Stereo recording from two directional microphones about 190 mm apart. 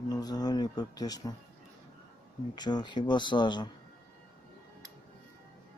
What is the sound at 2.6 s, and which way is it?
Speech, 20° left (ahead or behind).